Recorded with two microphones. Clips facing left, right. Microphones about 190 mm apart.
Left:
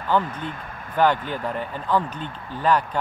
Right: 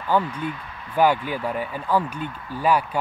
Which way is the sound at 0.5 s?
50° left (ahead or behind).